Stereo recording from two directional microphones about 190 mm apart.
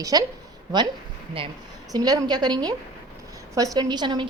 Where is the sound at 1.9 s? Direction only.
20° right (ahead or behind).